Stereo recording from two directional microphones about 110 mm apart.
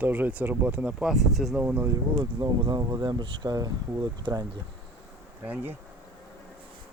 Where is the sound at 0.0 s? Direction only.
15° right (ahead or behind).